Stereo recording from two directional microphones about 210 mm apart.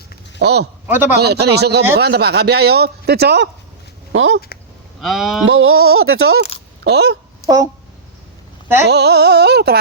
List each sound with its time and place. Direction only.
0.3 s speech: 50° right (ahead or behind)
0.9 s a man's voice: 10° right (ahead or behind)
1.1 s speech: 50° right (ahead or behind)
4.1 s speech: 65° right (ahead or behind)
4.9 s speech: centre (ahead or behind)
5.5 s speech: 85° right
6.8 s speech: 50° right (ahead or behind)
7.4 s speech: 15° right (ahead or behind)
8.9 s speech: 50° right (ahead or behind)